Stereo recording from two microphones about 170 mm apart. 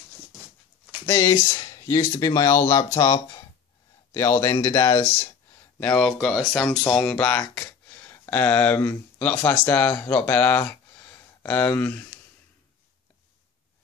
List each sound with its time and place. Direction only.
1.0 s speech: 15° left (ahead or behind)
5.8 s speech: 5° left (ahead or behind)